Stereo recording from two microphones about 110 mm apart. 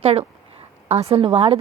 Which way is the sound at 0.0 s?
70° right (ahead or behind).